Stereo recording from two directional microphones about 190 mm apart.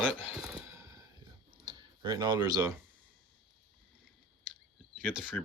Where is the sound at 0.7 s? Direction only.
15° right (ahead or behind).